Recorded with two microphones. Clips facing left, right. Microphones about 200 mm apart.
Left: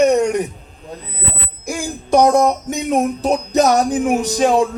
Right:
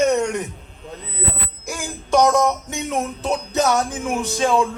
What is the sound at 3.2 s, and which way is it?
Music, 35° left (ahead or behind).